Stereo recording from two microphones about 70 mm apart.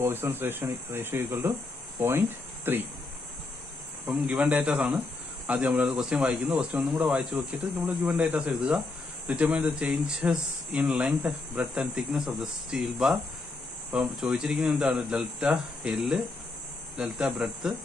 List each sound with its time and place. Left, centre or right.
0.0 s speech: right
4.1 s speech: right
7.3 s speech: right
8.5 s speech: centre
9.3 s speech: centre
11.7 s speech: centre
14.2 s speech: centre